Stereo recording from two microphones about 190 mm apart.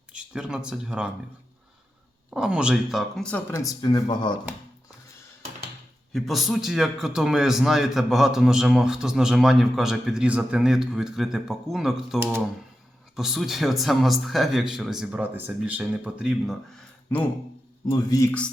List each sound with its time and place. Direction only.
0.1 s speech: 5° right (ahead or behind)
2.3 s speech: 5° right (ahead or behind); by 4.4 s 25° left (ahead or behind)
6.1 s a man's voice: centre (ahead or behind)
17.8 s speech: 15° left (ahead or behind)